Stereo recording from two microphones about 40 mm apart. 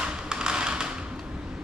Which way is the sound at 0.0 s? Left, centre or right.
Centre.